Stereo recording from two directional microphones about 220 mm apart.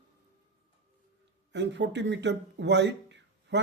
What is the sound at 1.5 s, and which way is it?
Speech, 55° right (ahead or behind).